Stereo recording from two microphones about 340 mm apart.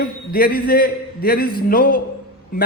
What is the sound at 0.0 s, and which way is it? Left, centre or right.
A man's voice, left.